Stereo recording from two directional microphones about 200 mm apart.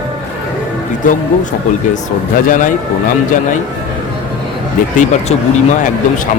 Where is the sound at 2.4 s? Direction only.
40° left (ahead or behind).